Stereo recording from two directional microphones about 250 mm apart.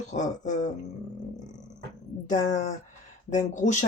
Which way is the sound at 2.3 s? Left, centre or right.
Left.